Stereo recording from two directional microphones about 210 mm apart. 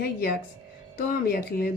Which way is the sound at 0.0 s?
45° left (ahead or behind).